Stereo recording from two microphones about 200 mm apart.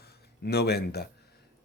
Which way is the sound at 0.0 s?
55° left (ahead or behind).